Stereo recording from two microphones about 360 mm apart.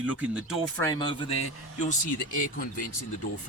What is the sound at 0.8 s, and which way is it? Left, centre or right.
Speech, centre.